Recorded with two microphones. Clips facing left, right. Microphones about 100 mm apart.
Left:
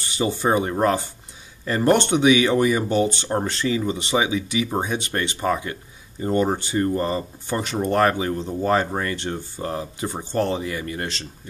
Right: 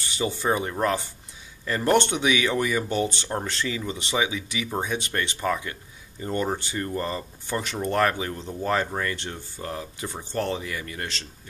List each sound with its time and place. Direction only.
0.2 s speech: 25° left (ahead or behind)